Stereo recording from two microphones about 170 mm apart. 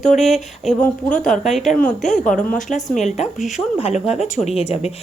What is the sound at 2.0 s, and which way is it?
Speech, 45° left (ahead or behind).